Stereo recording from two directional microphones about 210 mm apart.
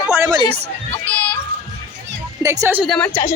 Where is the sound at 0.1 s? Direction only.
15° right (ahead or behind).